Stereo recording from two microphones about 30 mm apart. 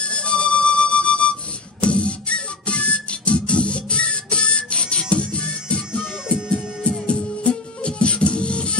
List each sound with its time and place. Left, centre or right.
0.0 s music: left